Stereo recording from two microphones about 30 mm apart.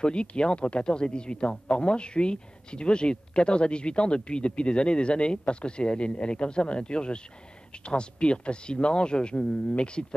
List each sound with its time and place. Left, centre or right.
0.0 s speech: left